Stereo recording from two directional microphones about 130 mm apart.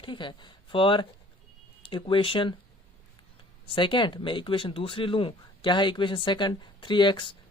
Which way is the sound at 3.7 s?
40° left (ahead or behind).